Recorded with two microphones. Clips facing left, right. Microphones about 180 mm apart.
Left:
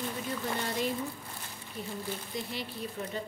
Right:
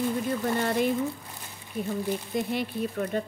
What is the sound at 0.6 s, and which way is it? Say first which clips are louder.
Speech: right 7 dB; 60° right (ahead or behind).